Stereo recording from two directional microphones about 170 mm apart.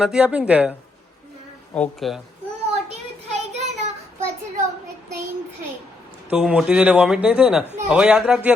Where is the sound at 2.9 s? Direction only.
40° right (ahead or behind).